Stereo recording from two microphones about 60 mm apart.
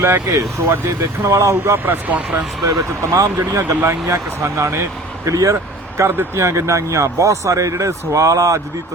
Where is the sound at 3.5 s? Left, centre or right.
Right.